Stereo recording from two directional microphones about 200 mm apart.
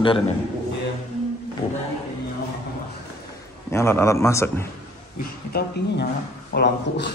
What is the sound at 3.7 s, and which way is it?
A man's voice, 10° left (ahead or behind).